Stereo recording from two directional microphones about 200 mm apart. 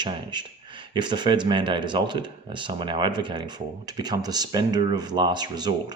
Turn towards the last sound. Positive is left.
turn(degrees=-20)  # may be behind; listen again after turning